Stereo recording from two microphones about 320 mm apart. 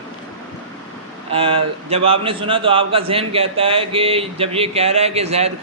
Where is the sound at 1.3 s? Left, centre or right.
Centre.